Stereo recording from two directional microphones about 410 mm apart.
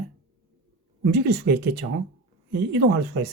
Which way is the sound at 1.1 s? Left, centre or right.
Right.